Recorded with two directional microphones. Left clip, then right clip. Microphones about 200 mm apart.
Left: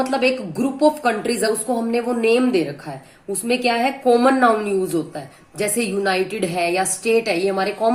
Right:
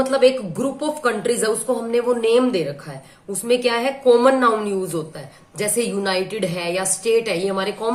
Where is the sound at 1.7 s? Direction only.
20° left (ahead or behind).